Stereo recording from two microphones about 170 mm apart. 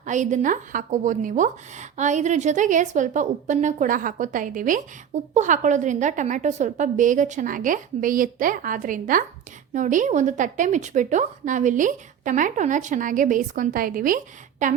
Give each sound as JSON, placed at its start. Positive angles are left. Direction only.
{"t": 0.0, "sound": "a woman's voice", "side_deg": -45}